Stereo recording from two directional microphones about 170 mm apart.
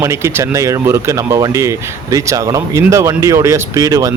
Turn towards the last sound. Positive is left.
turn(degrees=-20)  # may be behind; listen again after turning